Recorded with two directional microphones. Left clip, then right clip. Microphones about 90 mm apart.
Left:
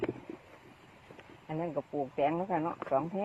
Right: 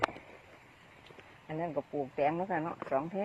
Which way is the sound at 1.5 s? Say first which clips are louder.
Even; 45° left (ahead or behind).